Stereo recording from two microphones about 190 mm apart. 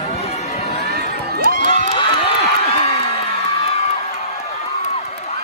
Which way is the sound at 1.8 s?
30° left (ahead or behind).